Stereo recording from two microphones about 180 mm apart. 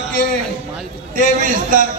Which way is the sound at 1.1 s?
45° right (ahead or behind).